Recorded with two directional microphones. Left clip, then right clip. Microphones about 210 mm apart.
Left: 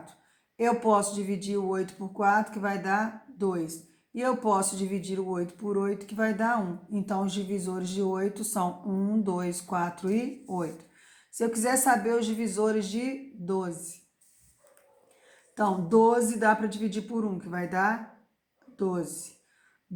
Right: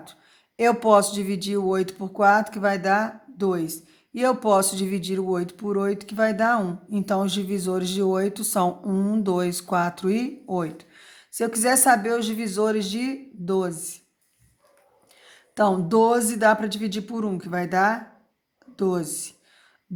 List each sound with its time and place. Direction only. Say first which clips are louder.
0.5 s speech: right 7 dB; 40° right (ahead or behind)
15.5 s speech: right 4 dB; 40° right (ahead or behind)